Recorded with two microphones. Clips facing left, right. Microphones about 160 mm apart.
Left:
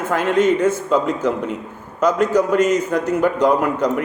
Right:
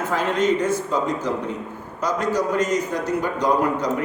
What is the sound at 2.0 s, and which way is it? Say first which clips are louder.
A man's voice: left 6 dB; 55° left (ahead or behind).